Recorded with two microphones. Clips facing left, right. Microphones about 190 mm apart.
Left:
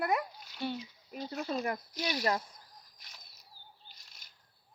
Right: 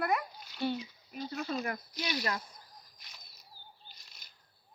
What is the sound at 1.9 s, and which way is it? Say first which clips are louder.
Speech: left 3 dB; 45° left (ahead or behind).